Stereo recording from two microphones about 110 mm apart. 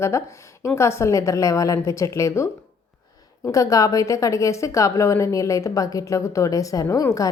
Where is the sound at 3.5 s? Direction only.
30° left (ahead or behind).